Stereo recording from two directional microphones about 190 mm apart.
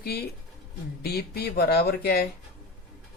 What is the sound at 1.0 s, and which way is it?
Speech, 55° left (ahead or behind).